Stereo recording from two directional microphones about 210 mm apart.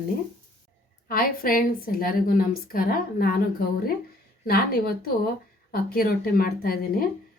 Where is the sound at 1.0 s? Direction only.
45° left (ahead or behind).